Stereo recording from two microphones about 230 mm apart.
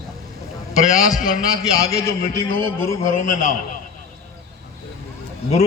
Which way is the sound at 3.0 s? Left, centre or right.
Left.